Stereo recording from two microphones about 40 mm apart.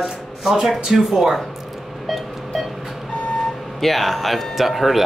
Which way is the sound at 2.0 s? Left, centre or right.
Centre.